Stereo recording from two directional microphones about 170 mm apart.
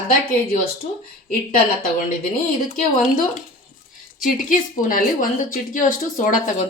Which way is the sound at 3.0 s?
50° left (ahead or behind).